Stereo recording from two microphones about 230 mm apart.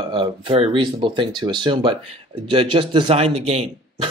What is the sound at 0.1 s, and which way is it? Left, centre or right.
Speech, right.